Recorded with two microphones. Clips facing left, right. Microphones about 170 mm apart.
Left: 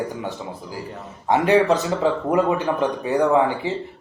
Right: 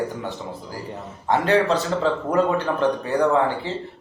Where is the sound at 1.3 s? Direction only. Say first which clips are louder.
Left 2 dB; 15° left (ahead or behind).